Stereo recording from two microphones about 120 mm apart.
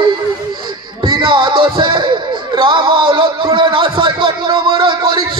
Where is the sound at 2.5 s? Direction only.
45° right (ahead or behind).